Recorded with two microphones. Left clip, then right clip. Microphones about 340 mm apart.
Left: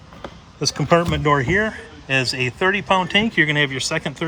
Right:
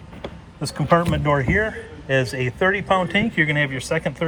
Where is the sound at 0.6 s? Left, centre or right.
Centre.